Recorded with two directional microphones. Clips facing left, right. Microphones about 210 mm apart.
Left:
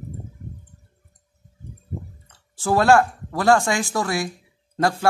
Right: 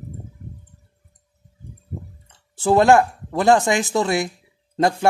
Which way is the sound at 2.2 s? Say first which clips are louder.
Right 6 dB; 25° right (ahead or behind).